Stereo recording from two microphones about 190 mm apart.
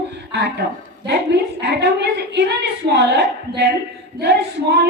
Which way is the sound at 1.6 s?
65° right (ahead or behind).